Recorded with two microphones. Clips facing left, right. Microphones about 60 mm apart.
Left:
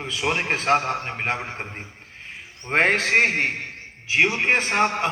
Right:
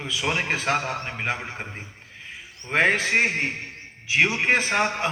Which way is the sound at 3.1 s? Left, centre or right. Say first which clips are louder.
Left 3 dB; left.